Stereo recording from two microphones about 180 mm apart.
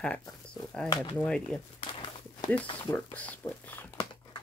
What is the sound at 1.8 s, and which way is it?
Walk, 25° left (ahead or behind).